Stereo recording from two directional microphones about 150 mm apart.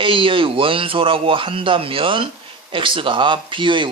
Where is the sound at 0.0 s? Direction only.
35° right (ahead or behind).